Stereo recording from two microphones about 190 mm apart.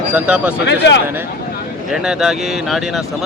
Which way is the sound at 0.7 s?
65° left (ahead or behind).